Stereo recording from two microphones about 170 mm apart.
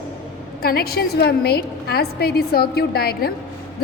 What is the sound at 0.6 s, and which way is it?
A woman's voice, 65° left (ahead or behind).